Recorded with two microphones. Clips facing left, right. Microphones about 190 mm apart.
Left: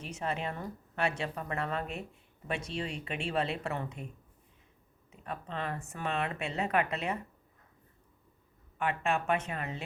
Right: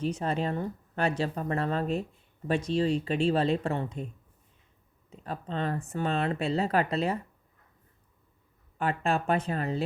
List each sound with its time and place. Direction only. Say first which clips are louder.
0.0 s speech: right 6 dB; 35° right (ahead or behind)
5.2 s speech: right 5 dB; 30° right (ahead or behind)
8.8 s speech: right 3 dB; 35° right (ahead or behind)